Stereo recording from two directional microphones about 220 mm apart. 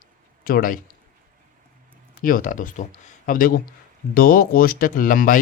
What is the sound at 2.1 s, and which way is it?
Speech, 40° left (ahead or behind).